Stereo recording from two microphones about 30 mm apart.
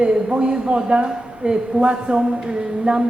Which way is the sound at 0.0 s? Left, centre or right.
Right.